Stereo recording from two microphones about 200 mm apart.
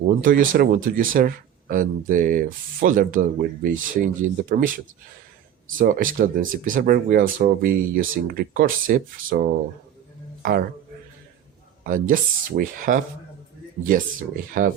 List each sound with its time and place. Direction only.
0.2 s speech: 45° right (ahead or behind)
11.9 s speech: 40° right (ahead or behind)
14.5 s speech: 45° right (ahead or behind)